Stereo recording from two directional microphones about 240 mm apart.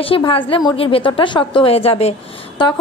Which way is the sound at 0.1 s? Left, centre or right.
Left.